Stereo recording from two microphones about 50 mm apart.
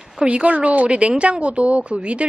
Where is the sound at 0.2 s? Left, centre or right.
Right.